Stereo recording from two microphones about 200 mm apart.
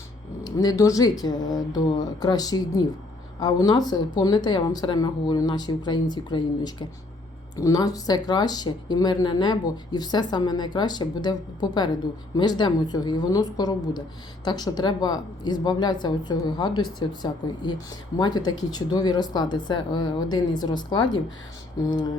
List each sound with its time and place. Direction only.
0.4 s speech: 20° left (ahead or behind)